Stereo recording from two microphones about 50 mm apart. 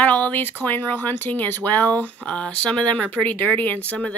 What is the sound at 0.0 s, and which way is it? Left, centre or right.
Speech, left.